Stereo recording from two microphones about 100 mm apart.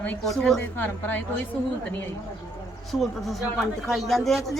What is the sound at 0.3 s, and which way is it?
Speech, 5° left (ahead or behind).